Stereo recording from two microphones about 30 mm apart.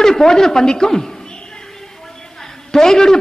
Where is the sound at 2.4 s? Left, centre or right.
Centre.